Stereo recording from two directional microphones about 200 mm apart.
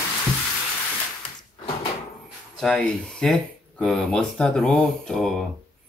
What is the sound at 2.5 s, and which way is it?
Speech, centre (ahead or behind).